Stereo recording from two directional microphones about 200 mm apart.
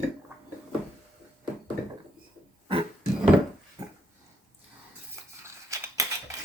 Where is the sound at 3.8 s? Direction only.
20° right (ahead or behind).